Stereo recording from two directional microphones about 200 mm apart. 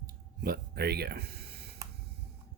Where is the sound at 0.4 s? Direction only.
50° right (ahead or behind).